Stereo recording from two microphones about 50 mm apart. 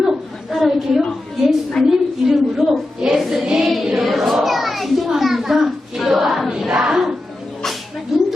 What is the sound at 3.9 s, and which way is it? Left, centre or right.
Children playing, centre.